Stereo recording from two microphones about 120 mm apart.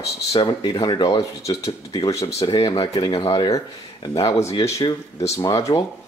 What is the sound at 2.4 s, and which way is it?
Speech, 40° left (ahead or behind).